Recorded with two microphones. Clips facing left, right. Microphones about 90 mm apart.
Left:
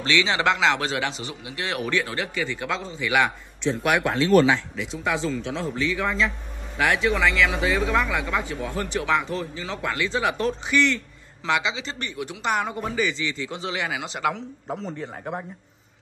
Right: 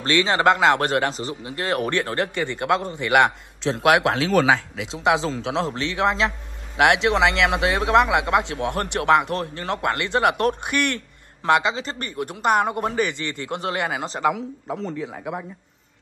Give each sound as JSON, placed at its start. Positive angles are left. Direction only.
{"t": 0.0, "sound": "a man's voice", "side_deg": -45}
{"t": 14.3, "sound": "a man's voice", "side_deg": 0}